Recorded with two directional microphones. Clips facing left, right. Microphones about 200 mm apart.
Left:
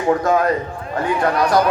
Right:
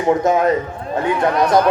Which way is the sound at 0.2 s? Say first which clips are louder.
Right 1 dB; 20° right (ahead or behind).